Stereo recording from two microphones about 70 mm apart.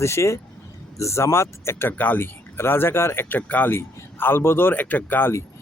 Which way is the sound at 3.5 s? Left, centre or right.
Left.